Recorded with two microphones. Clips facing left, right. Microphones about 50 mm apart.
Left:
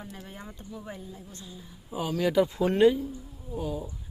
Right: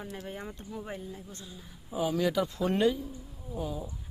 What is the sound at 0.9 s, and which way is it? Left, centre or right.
Speech, right.